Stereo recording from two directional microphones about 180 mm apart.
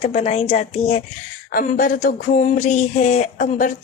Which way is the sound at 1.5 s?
50° left (ahead or behind).